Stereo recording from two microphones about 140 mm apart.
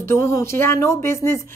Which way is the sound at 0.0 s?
20° left (ahead or behind).